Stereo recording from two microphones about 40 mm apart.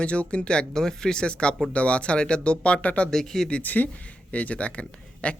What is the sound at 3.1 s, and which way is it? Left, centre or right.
Speech, centre.